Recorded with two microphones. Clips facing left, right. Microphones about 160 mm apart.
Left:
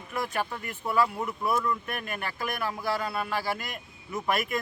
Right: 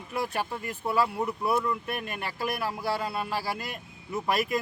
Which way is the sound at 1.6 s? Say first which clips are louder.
Even; 20° right (ahead or behind).